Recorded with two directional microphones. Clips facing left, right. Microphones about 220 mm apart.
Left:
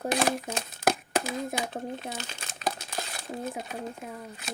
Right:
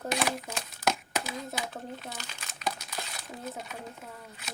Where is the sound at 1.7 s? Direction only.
25° left (ahead or behind).